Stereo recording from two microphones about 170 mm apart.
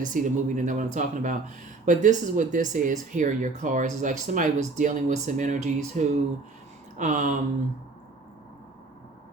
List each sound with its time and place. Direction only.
0.0 s speech: 50° right (ahead or behind)